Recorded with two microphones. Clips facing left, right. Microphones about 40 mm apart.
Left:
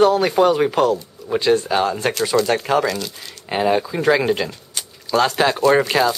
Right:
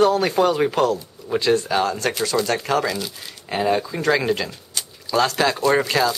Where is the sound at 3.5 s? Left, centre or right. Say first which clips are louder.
Left 2 dB; centre.